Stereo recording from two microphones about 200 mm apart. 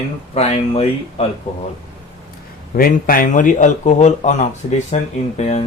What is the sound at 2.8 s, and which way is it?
Speech, 45° left (ahead or behind).